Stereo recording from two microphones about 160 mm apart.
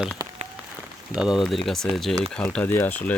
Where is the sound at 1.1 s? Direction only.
5° right (ahead or behind).